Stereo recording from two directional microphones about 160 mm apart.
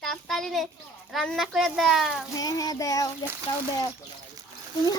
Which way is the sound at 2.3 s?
20° left (ahead or behind).